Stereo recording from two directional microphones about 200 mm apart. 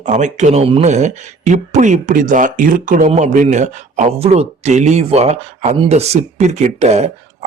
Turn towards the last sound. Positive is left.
turn(degrees=-35)  # may be behind; listen again after turning